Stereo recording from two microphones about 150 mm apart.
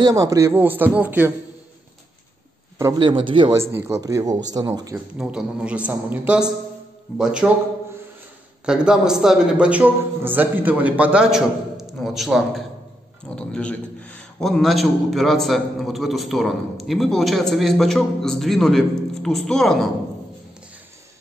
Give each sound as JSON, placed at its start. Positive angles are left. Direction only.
{"t": 0.0, "sound": "a man's voice", "side_deg": -25}
{"t": 2.8, "sound": "a man's voice", "side_deg": -25}
{"t": 3.5, "sound": "speech", "side_deg": -15}
{"t": 4.9, "sound": "a man's voice", "side_deg": -5}
{"t": 8.6, "sound": "a man's voice", "side_deg": -5}